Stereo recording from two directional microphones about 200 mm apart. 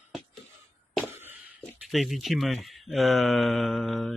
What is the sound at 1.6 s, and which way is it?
Speech, 5° left (ahead or behind).